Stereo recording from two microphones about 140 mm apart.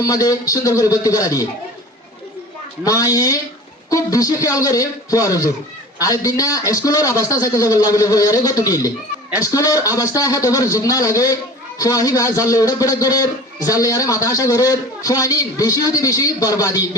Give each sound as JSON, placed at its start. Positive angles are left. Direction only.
{"t": 0.0, "sound": "a man's voice", "side_deg": 25}
{"t": 2.8, "sound": "a man's voice", "side_deg": 25}